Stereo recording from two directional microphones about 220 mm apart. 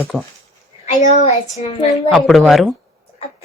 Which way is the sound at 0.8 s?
30° left (ahead or behind).